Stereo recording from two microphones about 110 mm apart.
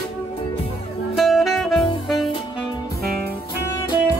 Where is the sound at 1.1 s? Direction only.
Centre (ahead or behind).